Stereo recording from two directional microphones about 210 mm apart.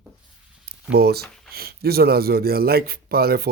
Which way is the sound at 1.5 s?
45° right (ahead or behind).